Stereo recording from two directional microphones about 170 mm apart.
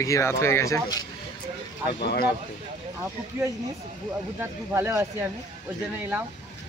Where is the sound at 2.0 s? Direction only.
70° left (ahead or behind).